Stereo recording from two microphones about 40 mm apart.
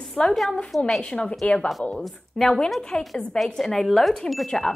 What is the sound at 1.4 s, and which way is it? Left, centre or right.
Speech, left.